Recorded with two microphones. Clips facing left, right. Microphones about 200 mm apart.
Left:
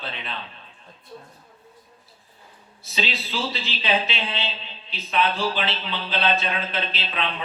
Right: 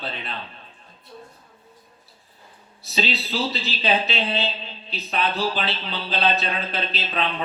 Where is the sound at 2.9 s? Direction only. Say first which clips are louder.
Right 3 dB; 40° right (ahead or behind).